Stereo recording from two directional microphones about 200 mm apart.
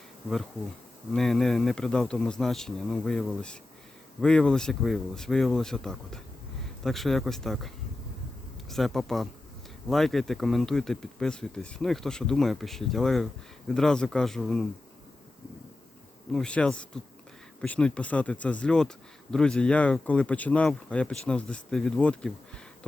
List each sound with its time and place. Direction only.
1.1 s speech: centre (ahead or behind)
8.7 s speech: centre (ahead or behind)
16.3 s speech: 5° left (ahead or behind)